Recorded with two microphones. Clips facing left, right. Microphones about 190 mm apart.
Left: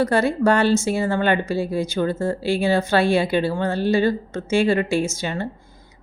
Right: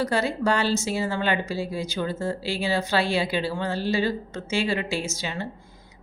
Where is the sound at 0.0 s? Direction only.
55° left (ahead or behind).